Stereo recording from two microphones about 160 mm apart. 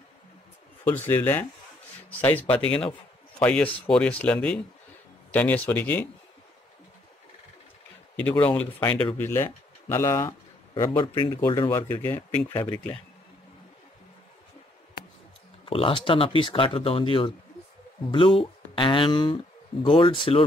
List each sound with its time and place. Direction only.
0.8 s speech: 15° left (ahead or behind)
2.5 s a man's voice: 10° left (ahead or behind)
8.2 s speech: 10° left (ahead or behind)
10.7 s speech: 30° left (ahead or behind)
11.7 s speech: 15° left (ahead or behind)
15.6 s speech: 35° left (ahead or behind)